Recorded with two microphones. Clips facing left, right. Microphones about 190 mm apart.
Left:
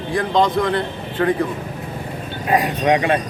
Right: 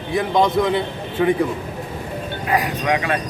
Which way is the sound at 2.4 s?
25° left (ahead or behind).